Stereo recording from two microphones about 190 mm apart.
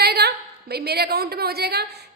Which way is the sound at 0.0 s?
55° right (ahead or behind).